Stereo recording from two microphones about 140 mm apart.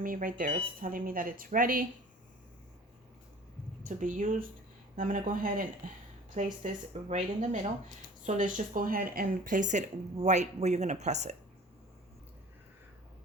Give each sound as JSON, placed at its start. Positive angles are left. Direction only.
{"t": 0.0, "sound": "speech", "side_deg": -80}
{"t": 3.8, "sound": "speech", "side_deg": -65}
{"t": 6.3, "sound": "speech", "side_deg": -60}
{"t": 8.2, "sound": "speech", "side_deg": -65}